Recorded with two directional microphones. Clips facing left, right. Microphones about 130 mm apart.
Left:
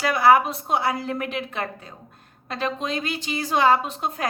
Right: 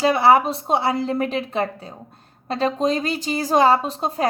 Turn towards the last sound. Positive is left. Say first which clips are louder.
# right 3 dB
turn(degrees=-35)  # may be behind; listen again after turning